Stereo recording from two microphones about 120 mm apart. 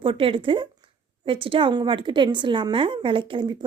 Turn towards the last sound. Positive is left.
turn(degrees=-40)  # may be behind; listen again after turning